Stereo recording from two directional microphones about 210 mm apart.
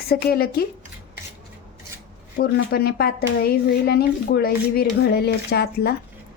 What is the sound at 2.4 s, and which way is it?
Speech, 50° left (ahead or behind).